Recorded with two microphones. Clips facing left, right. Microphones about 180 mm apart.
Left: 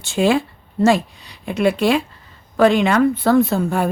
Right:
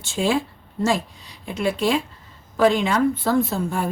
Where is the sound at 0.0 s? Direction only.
65° left (ahead or behind).